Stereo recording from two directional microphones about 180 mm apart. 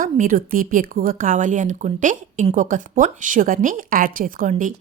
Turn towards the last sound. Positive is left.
turn(degrees=-50)  # may be behind; listen again after turning